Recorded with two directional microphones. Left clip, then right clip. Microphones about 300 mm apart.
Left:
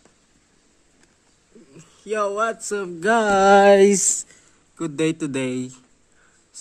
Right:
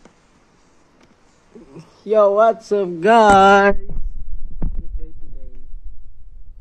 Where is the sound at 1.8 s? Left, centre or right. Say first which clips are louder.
Right 10 dB; centre.